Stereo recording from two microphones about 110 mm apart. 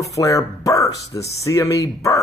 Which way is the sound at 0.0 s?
30° left (ahead or behind).